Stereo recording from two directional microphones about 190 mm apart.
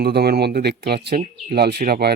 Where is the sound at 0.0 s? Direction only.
55° right (ahead or behind).